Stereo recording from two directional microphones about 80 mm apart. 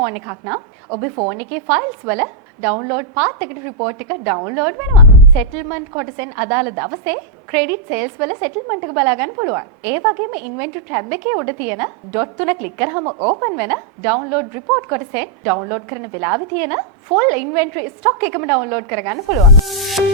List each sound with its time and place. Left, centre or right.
0.0 s a woman's voice: right
1.4 s a woman's voice: centre
13.0 s a woman's voice: right
13.6 s a woman's voice: centre
19.6 s music: centre